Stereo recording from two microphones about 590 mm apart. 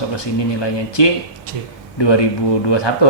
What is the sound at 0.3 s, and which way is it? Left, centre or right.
Speech, left.